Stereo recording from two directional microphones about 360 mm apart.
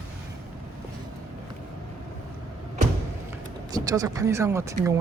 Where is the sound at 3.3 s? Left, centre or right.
Centre.